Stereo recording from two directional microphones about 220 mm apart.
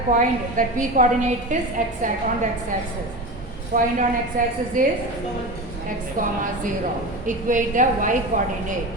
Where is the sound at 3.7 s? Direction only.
35° right (ahead or behind).